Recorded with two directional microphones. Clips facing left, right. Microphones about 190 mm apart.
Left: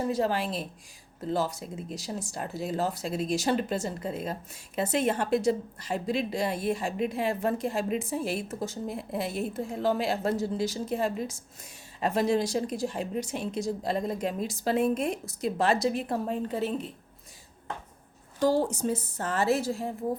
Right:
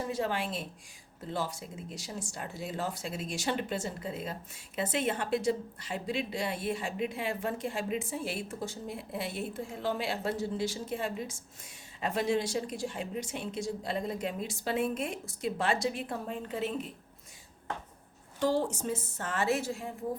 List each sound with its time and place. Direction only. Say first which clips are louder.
0.1 s speech: left 5 dB; 35° left (ahead or behind)
18.6 s speech: left 5 dB; 40° left (ahead or behind)